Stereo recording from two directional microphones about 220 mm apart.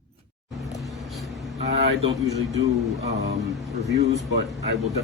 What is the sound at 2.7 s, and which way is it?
Speech, centre (ahead or behind).